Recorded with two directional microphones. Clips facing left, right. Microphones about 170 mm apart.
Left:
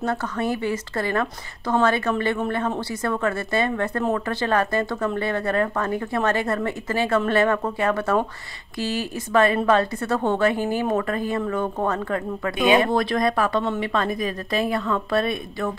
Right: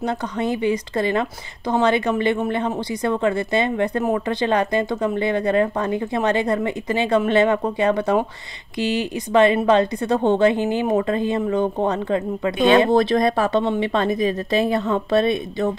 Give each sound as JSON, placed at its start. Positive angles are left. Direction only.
{"t": 0.0, "sound": "a woman's voice", "side_deg": -20}